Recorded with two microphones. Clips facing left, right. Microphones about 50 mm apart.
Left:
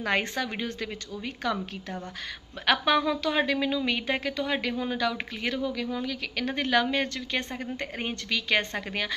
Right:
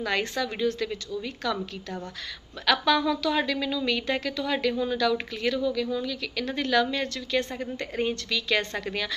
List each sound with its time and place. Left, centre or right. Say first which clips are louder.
0.0 s a woman's voice: even; left
2.6 s a woman's voice: right 1 dB; left